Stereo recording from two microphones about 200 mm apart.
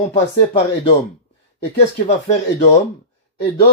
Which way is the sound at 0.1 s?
30° left (ahead or behind).